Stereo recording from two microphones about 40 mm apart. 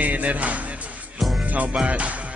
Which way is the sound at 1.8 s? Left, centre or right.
Right.